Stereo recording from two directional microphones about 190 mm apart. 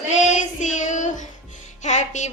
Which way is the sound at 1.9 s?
35° left (ahead or behind).